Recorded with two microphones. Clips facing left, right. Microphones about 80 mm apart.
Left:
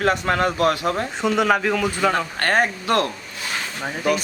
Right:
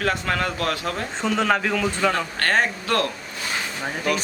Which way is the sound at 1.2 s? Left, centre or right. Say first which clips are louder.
Left 2 dB; centre.